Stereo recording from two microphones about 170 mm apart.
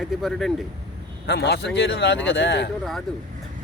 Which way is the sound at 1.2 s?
75° left (ahead or behind).